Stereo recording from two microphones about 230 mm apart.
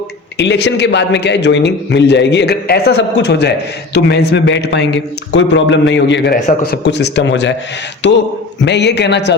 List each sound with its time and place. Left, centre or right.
0.3 s a man's voice: left
6.3 s a man's voice: left
6.8 s a man's voice: left